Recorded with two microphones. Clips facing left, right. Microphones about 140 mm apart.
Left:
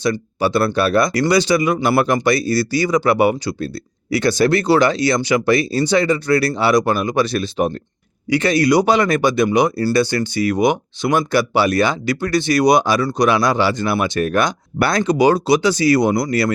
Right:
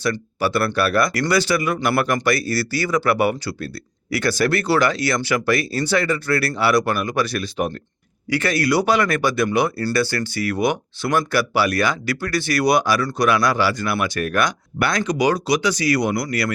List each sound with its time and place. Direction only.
0.0 s speech: 20° left (ahead or behind)